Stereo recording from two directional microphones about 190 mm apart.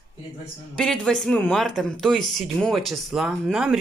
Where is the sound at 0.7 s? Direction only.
5° left (ahead or behind).